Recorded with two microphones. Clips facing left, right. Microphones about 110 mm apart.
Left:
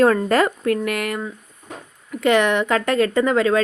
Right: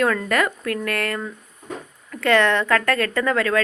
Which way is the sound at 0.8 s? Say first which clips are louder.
Left 1 dB; 15° left (ahead or behind).